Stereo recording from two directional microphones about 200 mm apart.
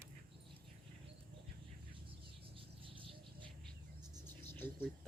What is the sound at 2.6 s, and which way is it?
Bird, 25° right (ahead or behind).